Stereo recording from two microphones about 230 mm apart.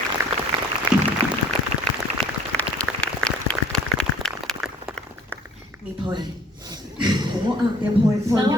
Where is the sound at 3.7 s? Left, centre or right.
Centre.